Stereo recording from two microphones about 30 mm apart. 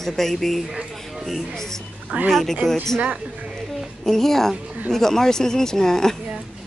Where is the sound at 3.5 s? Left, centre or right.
Centre.